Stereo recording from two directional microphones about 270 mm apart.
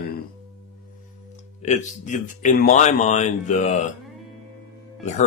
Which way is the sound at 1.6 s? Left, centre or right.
Left.